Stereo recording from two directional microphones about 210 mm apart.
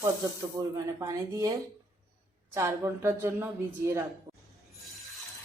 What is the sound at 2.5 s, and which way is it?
A woman's voice, 15° right (ahead or behind).